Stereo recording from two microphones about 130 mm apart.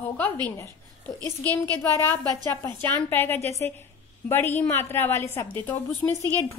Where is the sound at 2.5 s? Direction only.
15° left (ahead or behind).